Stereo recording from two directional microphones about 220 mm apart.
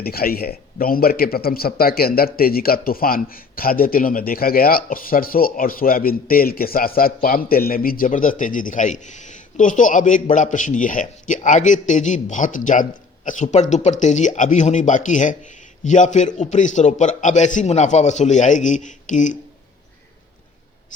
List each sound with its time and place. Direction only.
0.0 s a man's voice: 45° left (ahead or behind)